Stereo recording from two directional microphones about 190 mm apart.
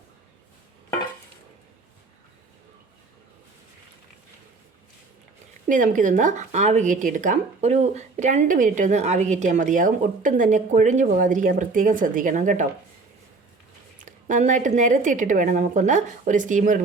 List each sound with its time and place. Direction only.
5.6 s speech: 45° right (ahead or behind)
14.0 s speech: 40° right (ahead or behind)